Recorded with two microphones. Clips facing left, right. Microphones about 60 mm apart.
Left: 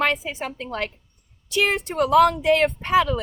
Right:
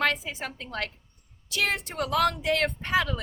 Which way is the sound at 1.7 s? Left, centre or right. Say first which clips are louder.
Left 8 dB; left.